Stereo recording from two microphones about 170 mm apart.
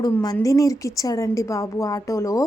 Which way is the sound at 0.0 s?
20° left (ahead or behind).